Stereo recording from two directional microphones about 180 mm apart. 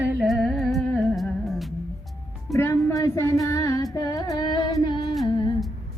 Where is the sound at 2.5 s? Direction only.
15° left (ahead or behind).